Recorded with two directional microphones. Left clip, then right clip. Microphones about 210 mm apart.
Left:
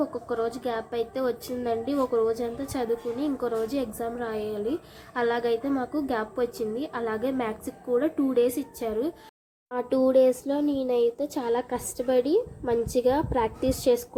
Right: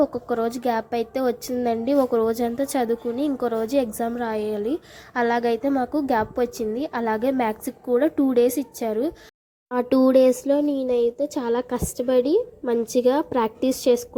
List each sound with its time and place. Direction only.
0.0 s a woman's voice: 35° right (ahead or behind)